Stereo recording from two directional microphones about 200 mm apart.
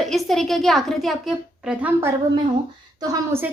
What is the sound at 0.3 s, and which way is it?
Speech, centre (ahead or behind).